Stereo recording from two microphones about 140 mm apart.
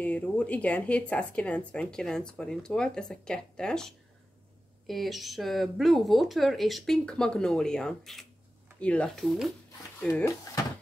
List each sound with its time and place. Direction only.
0.0 s speech: 10° left (ahead or behind)
9.9 s speech: 20° left (ahead or behind)